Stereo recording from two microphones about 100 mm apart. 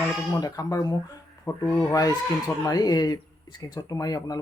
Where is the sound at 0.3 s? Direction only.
35° left (ahead or behind).